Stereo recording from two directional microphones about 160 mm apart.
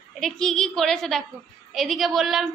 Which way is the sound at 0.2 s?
5° left (ahead or behind).